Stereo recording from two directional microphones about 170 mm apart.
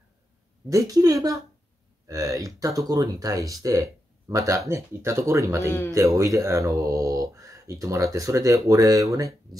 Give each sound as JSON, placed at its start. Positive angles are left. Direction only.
{"t": 0.7, "sound": "speech", "side_deg": -20}